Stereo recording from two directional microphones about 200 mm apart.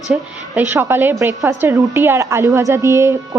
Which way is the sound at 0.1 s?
10° right (ahead or behind).